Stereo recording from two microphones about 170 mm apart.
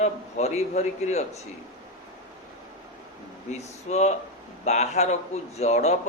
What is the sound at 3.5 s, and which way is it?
A man's voice, 40° left (ahead or behind).